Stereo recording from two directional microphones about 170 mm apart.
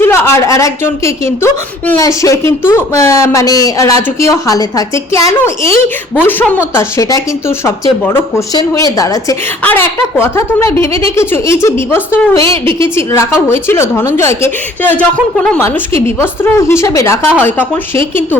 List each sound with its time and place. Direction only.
0.0 s a woman's voice: 15° left (ahead or behind)